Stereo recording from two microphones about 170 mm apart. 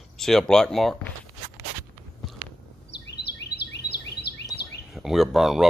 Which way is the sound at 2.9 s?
80° left.